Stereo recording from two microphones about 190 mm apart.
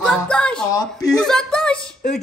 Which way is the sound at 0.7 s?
20° left (ahead or behind).